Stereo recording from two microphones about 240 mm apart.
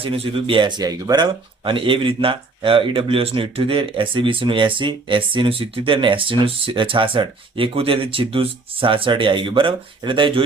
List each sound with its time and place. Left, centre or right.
0.0 s speech: right